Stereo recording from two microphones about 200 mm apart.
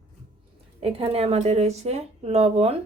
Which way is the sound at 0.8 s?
30° right (ahead or behind).